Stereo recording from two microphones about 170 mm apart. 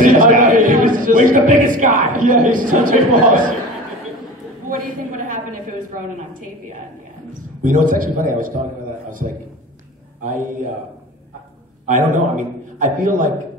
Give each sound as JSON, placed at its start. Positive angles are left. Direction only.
{"t": 0.0, "sound": "a man's voice", "side_deg": -50}
{"t": 4.6, "sound": "a sound", "side_deg": -50}
{"t": 7.6, "sound": "a man's voice", "side_deg": -50}
{"t": 11.8, "sound": "a man's voice", "side_deg": -45}